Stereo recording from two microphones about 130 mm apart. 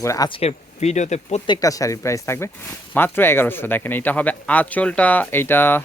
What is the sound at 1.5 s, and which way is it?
A man's voice, 25° left (ahead or behind).